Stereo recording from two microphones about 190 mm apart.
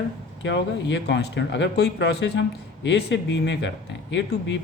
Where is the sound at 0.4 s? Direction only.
65° left (ahead or behind).